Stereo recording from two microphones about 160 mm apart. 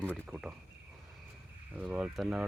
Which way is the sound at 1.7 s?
5° right (ahead or behind).